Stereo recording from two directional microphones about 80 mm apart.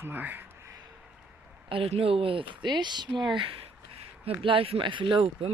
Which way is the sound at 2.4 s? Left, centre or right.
Right.